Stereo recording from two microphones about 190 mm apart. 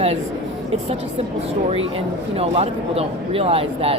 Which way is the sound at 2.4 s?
30° right (ahead or behind).